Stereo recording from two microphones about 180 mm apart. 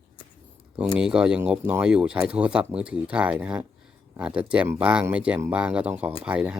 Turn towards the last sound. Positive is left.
turn(degrees=-5)  # may be behind; listen again after turning